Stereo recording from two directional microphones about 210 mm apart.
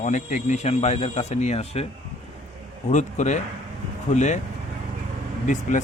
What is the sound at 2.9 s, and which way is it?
Speech, 35° left (ahead or behind).